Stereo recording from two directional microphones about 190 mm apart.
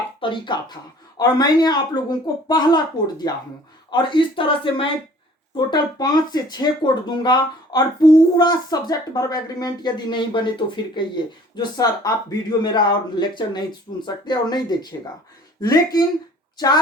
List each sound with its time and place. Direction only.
0.2 s speech: 25° left (ahead or behind)